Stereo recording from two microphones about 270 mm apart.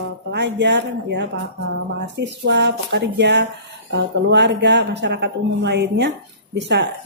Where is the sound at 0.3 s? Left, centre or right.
Right.